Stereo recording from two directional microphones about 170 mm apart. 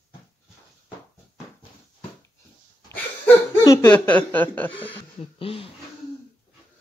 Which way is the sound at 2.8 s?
10° left (ahead or behind).